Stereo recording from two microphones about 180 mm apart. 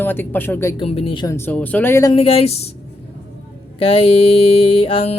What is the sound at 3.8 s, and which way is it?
Mantra, 30° left (ahead or behind).